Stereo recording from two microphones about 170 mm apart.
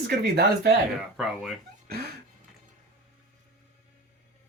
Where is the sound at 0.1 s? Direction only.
70° right (ahead or behind).